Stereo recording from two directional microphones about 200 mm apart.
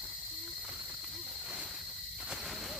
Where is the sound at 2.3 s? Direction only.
Centre (ahead or behind).